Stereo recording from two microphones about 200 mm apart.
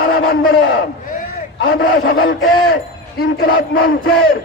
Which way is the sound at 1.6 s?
80° left.